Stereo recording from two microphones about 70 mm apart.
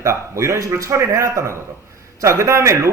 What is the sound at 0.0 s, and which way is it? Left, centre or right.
A man's voice, right.